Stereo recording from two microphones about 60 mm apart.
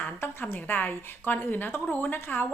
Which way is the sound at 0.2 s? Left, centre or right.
Left.